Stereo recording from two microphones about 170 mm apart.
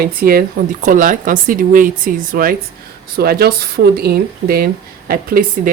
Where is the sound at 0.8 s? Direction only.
50° right (ahead or behind).